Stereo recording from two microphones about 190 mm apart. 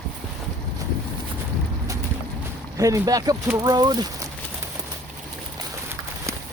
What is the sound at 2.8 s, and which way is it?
Speech, 20° right (ahead or behind).